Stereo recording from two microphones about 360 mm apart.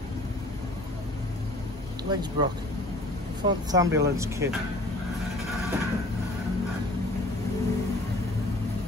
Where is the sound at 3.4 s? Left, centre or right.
Centre.